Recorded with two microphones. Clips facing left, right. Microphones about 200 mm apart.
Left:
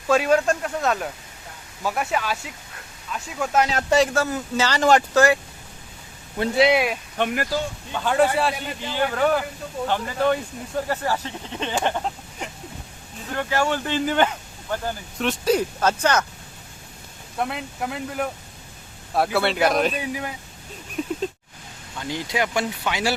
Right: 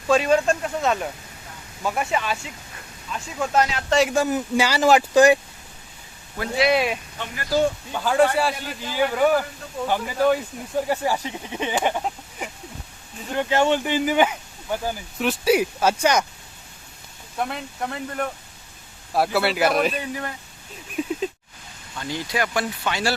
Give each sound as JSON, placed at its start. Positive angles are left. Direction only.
{"t": 0.1, "sound": "speech", "side_deg": 5}
{"t": 4.1, "sound": "speech", "side_deg": -15}
{"t": 6.3, "sound": "speech", "side_deg": 25}
{"t": 6.7, "sound": "speech", "side_deg": 5}
{"t": 13.3, "sound": "speech", "side_deg": -20}
{"t": 17.3, "sound": "speech", "side_deg": 0}
{"t": 20.0, "sound": "speech", "side_deg": 10}
{"t": 21.0, "sound": "speech", "side_deg": -5}
{"t": 21.9, "sound": "speech", "side_deg": 15}